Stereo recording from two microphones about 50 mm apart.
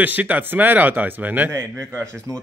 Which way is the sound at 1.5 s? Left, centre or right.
Right.